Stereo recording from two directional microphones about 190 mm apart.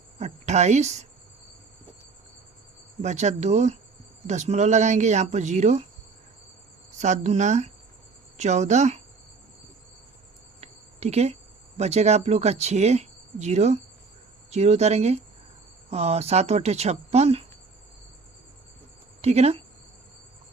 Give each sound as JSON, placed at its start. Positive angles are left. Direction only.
{"t": 0.2, "sound": "speech", "side_deg": -35}
{"t": 3.0, "sound": "speech", "side_deg": -40}
{"t": 7.0, "sound": "speech", "side_deg": -40}
{"t": 10.6, "sound": "cricket", "side_deg": -35}
{"t": 11.8, "sound": "speech", "side_deg": -35}
{"t": 19.2, "sound": "speech", "side_deg": -35}